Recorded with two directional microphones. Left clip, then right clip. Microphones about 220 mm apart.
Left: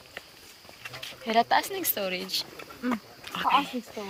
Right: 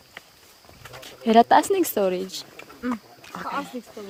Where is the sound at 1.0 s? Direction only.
40° right (ahead or behind).